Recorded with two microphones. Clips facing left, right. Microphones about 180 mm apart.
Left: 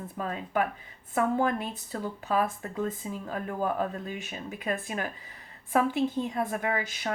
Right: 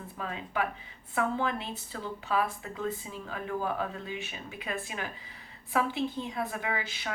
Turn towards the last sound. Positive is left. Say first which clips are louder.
# left 4 dB
turn(degrees=45)  # may be behind; listen again after turning